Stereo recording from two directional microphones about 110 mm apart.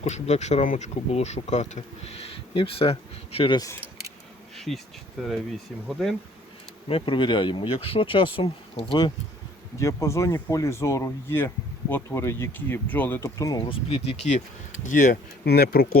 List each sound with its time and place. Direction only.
0.0 s speech: 90° left; by 3.5 s 60° left (ahead or behind)
4.5 s bee: centre (ahead or behind)
5.2 s speech: centre (ahead or behind)
6.8 s speech: 55° left (ahead or behind)
9.7 s speech: 30° left (ahead or behind)
13.2 s speech: 30° left (ahead or behind)
13.7 s speech: 55° left (ahead or behind); by 14.4 s 80° left